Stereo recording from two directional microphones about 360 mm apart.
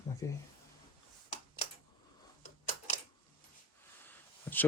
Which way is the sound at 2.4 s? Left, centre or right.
Centre.